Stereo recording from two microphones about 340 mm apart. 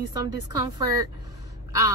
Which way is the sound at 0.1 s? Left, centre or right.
Centre.